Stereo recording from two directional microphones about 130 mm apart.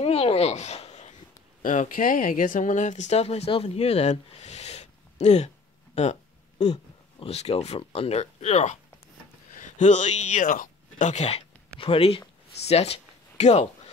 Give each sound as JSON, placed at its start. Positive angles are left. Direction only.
{"t": 0.0, "sound": "speech", "side_deg": 50}
{"t": 1.6, "sound": "speech", "side_deg": 85}
{"t": 9.5, "sound": "speech", "side_deg": 75}
{"t": 11.8, "sound": "speech", "side_deg": 45}